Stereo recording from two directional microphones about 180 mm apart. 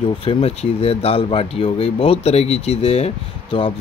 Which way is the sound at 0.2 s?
30° left (ahead or behind).